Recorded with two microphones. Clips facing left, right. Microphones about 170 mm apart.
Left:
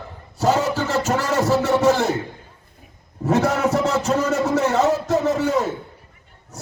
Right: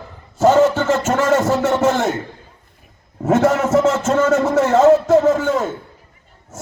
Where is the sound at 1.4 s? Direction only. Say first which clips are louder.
Right 2 dB; 35° left (ahead or behind).